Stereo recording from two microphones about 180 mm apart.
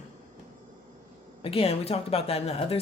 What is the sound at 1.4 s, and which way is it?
Speech, 30° left (ahead or behind).